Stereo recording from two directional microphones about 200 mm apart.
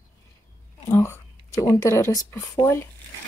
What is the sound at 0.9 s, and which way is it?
Speech, 15° left (ahead or behind).